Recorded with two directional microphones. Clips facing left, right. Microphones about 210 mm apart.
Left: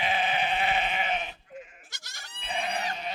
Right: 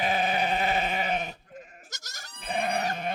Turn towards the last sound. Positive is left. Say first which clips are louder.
# right 4 dB
turn(degrees=-50)  # may be behind; listen again after turning